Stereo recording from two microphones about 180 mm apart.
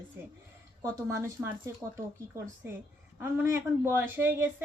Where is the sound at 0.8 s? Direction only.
15° right (ahead or behind).